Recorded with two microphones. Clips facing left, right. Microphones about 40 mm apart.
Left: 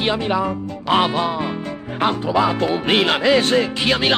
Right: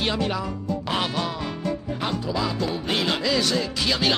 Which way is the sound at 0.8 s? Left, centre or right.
Left.